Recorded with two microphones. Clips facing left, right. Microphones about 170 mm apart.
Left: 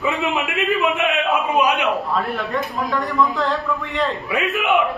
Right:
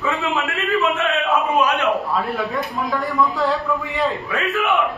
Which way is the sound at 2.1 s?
Centre (ahead or behind).